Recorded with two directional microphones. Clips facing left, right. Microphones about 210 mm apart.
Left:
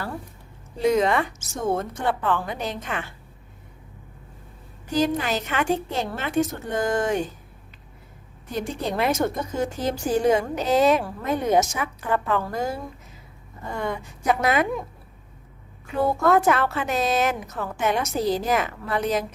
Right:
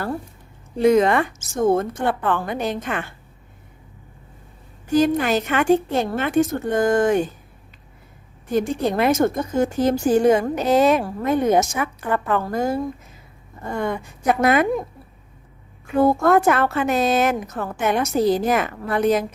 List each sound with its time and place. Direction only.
0.8 s a woman's voice: 55° right (ahead or behind)
4.9 s a woman's voice: 55° right (ahead or behind)
8.5 s a woman's voice: 50° right (ahead or behind)
16.0 s a woman's voice: 50° right (ahead or behind)